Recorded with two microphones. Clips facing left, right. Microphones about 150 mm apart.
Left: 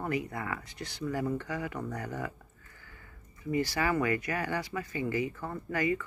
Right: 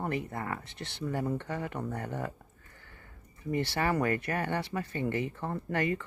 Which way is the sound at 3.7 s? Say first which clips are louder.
Right 2 dB; 35° right (ahead or behind).